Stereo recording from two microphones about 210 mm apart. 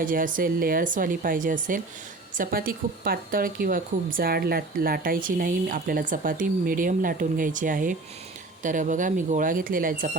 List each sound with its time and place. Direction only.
0.0 s speech: 40° right (ahead or behind)